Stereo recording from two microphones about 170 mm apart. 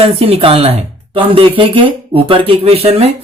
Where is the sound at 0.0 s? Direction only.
35° right (ahead or behind).